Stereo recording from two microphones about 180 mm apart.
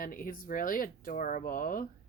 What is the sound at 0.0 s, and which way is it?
Speech, 50° left (ahead or behind).